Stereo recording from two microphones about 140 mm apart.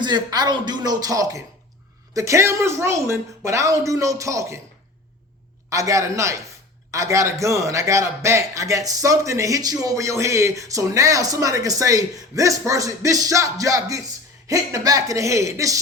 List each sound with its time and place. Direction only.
0.0 s a man's voice: 30° right (ahead or behind)
5.6 s a man's voice: 25° right (ahead or behind)